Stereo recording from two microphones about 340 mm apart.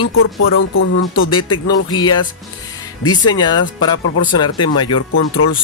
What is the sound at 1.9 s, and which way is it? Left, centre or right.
Speech, centre.